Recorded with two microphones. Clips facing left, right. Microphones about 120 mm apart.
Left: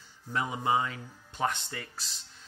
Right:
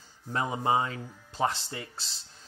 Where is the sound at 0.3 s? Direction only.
30° right (ahead or behind).